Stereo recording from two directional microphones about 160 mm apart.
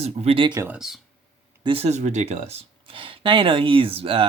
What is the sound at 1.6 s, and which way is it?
Speech, 40° right (ahead or behind).